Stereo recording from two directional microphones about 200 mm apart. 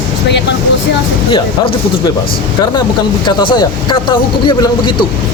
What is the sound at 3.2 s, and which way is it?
Speech, 20° left (ahead or behind).